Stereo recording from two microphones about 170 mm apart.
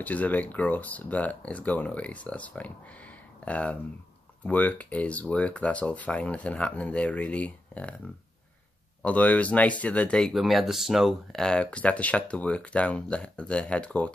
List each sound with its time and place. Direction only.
0.0 s speech: 10° left (ahead or behind)
9.0 s speech: 10° left (ahead or behind)